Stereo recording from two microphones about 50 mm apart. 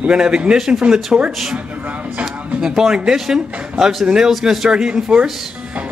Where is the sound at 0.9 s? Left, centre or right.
Centre.